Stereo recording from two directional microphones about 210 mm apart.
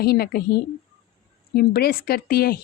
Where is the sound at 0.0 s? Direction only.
45° left (ahead or behind).